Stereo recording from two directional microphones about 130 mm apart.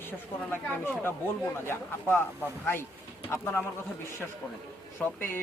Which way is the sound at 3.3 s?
20° left (ahead or behind).